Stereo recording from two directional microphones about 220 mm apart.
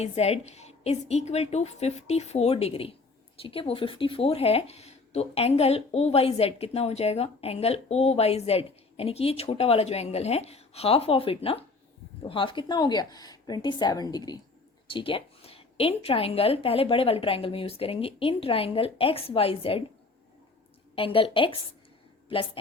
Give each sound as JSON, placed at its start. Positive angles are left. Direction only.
{"t": 0.0, "sound": "speech", "side_deg": 30}
{"t": 20.9, "sound": "a woman's voice", "side_deg": 25}